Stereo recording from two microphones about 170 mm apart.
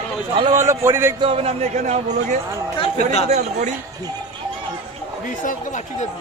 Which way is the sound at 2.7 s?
35° left (ahead or behind).